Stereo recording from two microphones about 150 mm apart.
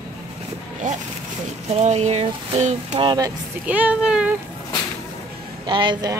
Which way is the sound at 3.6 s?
10° right (ahead or behind).